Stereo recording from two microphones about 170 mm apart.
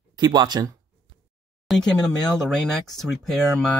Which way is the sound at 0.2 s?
25° right (ahead or behind).